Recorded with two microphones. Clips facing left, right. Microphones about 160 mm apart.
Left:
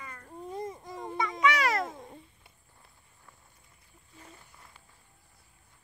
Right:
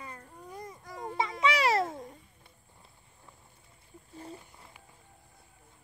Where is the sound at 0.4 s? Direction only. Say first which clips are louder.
Left 9 dB; 25° left (ahead or behind).